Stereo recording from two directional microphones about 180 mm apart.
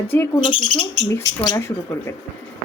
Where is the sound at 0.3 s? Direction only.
30° left (ahead or behind).